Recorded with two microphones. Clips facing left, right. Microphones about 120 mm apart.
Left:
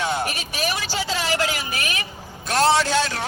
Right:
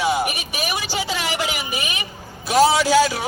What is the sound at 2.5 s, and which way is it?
Speech, centre (ahead or behind).